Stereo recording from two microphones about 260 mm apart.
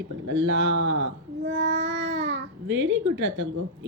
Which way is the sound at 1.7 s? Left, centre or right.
Right.